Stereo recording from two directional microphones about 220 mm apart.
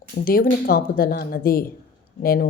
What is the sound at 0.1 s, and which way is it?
A woman's voice, 40° left (ahead or behind).